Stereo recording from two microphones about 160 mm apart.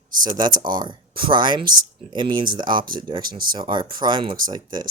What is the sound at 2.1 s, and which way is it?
Speech, 30° right (ahead or behind).